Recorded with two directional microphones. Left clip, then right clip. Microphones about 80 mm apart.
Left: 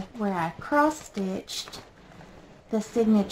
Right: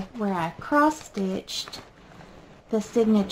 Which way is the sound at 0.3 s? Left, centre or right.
Right.